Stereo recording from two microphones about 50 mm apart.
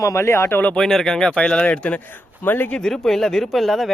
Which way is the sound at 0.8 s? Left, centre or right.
Centre.